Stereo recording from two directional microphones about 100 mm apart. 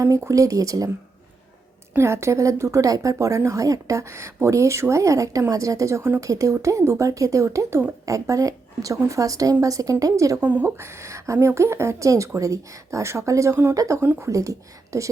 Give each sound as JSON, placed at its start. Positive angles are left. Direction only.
{"t": 0.0, "sound": "a woman's voice", "side_deg": -30}
{"t": 2.0, "sound": "a woman's voice", "side_deg": -25}
{"t": 8.0, "sound": "a woman's voice", "side_deg": -35}
{"t": 10.4, "sound": "a woman's voice", "side_deg": -20}